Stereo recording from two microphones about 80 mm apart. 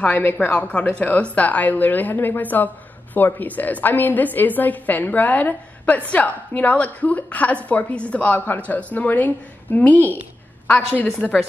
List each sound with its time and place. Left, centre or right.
0.0 s a woman's voice: left